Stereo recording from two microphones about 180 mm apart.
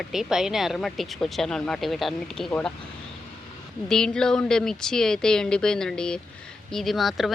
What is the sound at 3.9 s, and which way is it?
Speech, 5° left (ahead or behind).